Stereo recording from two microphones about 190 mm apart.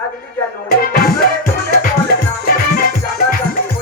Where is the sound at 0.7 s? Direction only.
50° left (ahead or behind).